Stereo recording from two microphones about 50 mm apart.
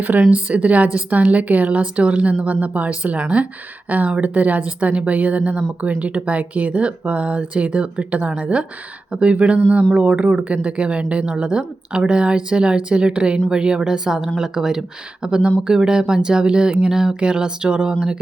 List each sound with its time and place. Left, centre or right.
0.0 s speech: right; by 17.9 s centre